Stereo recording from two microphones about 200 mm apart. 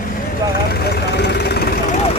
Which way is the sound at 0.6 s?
50° left (ahead or behind).